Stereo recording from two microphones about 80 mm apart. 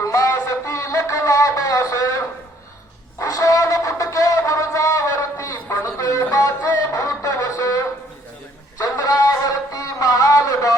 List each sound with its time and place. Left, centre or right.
0.0 s music: left
3.2 s music: left
8.8 s a sound: left